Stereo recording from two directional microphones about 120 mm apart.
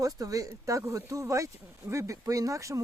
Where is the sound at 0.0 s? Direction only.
30° right (ahead or behind).